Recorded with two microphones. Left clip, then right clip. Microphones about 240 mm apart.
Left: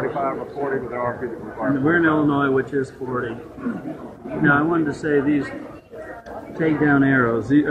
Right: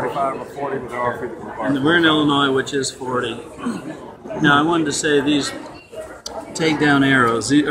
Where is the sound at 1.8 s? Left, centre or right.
Centre.